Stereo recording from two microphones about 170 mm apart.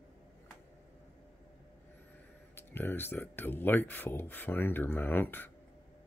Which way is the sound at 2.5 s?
10° left (ahead or behind).